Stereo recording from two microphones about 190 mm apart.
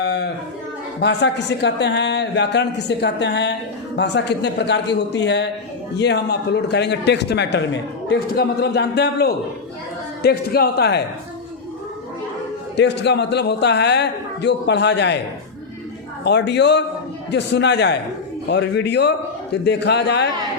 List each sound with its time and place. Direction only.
0.0 s a sound: 60° left (ahead or behind)
1.0 s a man's voice: 65° left (ahead or behind)
12.7 s a man's voice: 65° left (ahead or behind)
16.2 s a man's voice: 65° left (ahead or behind)